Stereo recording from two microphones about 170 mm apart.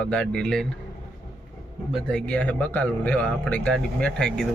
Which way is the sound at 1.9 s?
5° left (ahead or behind).